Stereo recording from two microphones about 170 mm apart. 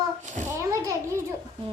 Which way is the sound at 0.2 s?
45° right (ahead or behind).